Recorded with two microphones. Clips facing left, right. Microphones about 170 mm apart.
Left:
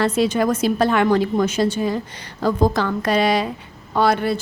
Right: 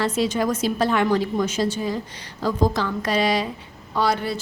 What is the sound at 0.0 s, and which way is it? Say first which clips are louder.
A woman's voice: left 4 dB; 60° left (ahead or behind).